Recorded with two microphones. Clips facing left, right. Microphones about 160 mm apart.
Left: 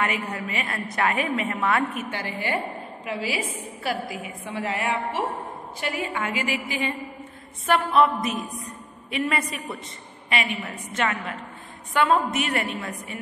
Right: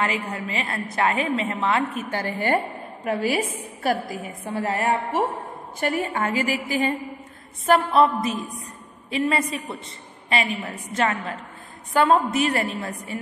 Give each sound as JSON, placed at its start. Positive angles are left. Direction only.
{"t": 0.0, "sound": "a woman's voice", "side_deg": -30}
{"t": 2.0, "sound": "a woman's voice", "side_deg": -45}